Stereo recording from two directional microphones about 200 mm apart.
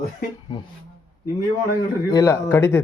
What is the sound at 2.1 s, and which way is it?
Speech, 15° left (ahead or behind).